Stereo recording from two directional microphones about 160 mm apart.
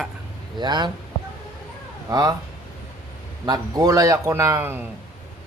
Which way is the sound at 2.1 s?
25° right (ahead or behind).